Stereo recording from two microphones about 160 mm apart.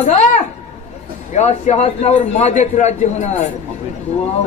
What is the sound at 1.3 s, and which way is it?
A man's voice, 45° left (ahead or behind).